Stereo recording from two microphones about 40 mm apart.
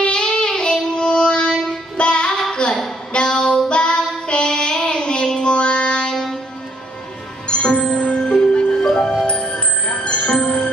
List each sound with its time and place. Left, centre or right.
0.0 s music: left
2.5 s a sound: centre
3.1 s child singing: left
6.1 s music: centre
7.4 s music: left